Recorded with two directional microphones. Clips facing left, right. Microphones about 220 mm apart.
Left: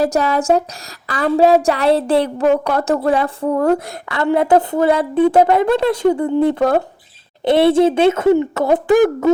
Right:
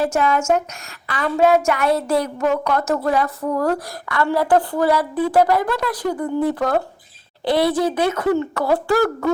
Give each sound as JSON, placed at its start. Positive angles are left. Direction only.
{"t": 0.0, "sound": "a woman's voice", "side_deg": 40}